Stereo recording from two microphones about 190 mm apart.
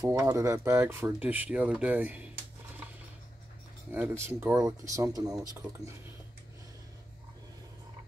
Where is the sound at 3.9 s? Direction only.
10° right (ahead or behind).